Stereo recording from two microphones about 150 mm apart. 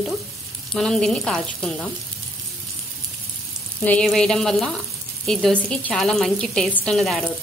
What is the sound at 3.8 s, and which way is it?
A woman's voice, 5° left (ahead or behind).